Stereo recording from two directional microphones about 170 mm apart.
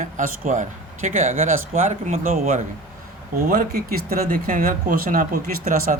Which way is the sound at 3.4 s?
60° right (ahead or behind).